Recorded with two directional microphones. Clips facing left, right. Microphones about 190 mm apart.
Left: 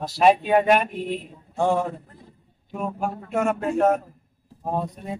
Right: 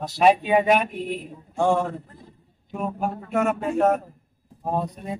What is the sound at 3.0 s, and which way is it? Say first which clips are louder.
A man's voice: right 1 dB; centre (ahead or behind).